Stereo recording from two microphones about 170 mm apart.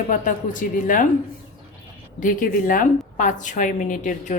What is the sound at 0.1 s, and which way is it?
Speech, 50° left (ahead or behind).